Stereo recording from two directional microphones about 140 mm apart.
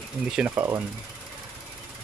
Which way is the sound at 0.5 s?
20° right (ahead or behind).